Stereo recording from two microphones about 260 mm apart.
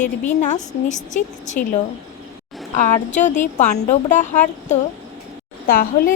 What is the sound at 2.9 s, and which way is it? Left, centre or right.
A woman's voice, left.